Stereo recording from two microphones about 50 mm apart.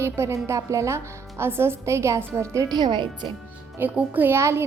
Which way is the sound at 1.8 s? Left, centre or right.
Right.